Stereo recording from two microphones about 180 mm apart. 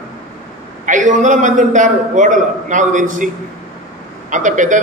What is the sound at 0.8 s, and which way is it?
A man's voice, 45° right (ahead or behind).